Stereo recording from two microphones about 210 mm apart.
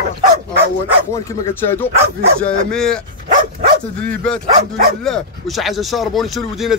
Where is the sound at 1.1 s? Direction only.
10° left (ahead or behind).